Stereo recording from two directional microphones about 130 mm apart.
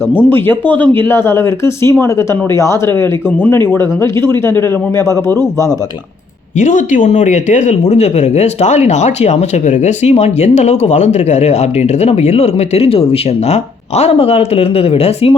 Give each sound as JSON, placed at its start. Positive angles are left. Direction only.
{"t": 0.1, "sound": "speech", "side_deg": 15}
{"t": 6.6, "sound": "speech", "side_deg": 70}